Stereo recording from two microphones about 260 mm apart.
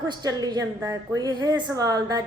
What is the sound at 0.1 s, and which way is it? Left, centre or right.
A woman's voice, centre.